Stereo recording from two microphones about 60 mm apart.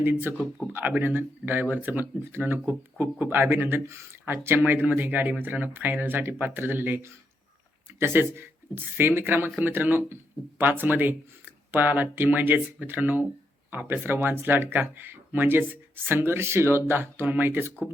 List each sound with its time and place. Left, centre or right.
0.0 s speech: right